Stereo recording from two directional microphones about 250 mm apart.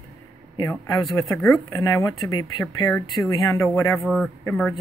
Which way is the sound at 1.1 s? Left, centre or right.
Centre.